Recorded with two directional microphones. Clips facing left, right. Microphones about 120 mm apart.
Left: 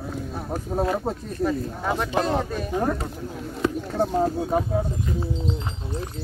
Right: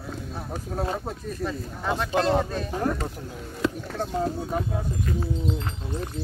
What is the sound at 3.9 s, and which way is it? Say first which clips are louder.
Speech: left 5 dB; 20° left (ahead or behind).